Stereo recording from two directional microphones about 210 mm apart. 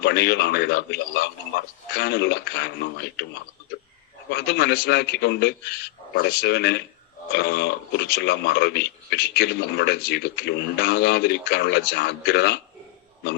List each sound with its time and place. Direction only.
0.0 s a man's voice: 50° left (ahead or behind)
4.3 s a man's voice: 50° left (ahead or behind)